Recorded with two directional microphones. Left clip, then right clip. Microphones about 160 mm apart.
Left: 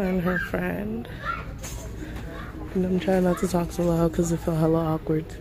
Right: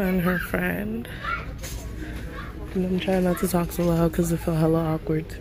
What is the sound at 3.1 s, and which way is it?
Speech, 20° left (ahead or behind).